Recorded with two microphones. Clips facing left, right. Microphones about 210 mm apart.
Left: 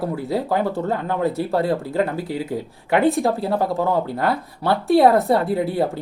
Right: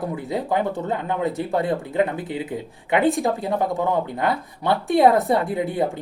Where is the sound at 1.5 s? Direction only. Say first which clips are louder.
Left 1 dB; 20° right (ahead or behind).